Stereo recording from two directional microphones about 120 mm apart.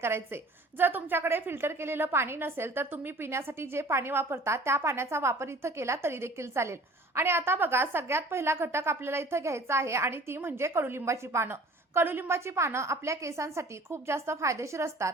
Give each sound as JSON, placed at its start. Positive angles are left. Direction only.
{"t": 0.8, "sound": "a woman's voice", "side_deg": -15}